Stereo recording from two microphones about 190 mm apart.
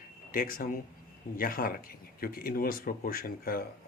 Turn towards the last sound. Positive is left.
turn(degrees=50)  # may be behind; listen again after turning